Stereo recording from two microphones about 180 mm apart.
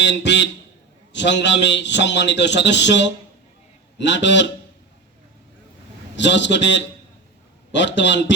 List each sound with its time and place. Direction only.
0.0 s a man's voice: 80° left
6.1 s a man's voice: 80° left